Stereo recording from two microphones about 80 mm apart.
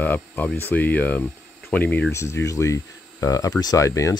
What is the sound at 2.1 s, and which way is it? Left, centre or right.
Speech, left.